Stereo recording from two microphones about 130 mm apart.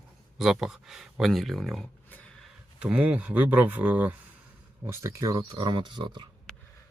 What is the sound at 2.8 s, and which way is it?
Speech, 10° right (ahead or behind).